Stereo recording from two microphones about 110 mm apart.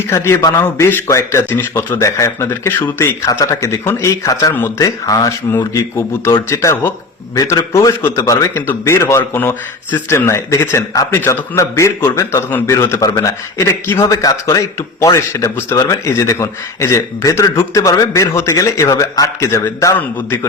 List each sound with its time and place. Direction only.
0.1 s a man's voice: 25° left (ahead or behind)
6.0 s a man's voice: 25° left (ahead or behind)
20.0 s a man's voice: 20° left (ahead or behind)